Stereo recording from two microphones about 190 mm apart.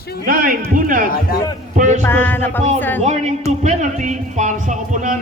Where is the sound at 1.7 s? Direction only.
40° right (ahead or behind).